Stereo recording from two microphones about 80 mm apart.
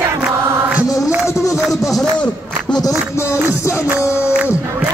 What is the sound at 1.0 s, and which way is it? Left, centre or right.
Music, left.